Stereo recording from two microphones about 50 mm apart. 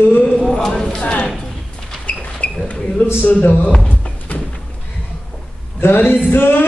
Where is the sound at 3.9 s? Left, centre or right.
Left.